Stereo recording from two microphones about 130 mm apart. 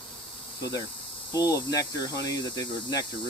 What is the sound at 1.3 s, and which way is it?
Speech, 30° left (ahead or behind).